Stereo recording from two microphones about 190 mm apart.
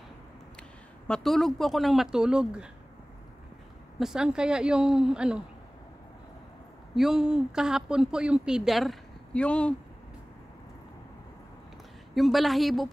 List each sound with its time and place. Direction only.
0.6 s speech: 5° left (ahead or behind)
4.0 s a woman's voice: 5° right (ahead or behind)
7.0 s a woman's voice: centre (ahead or behind)
12.1 s a woman's voice: centre (ahead or behind)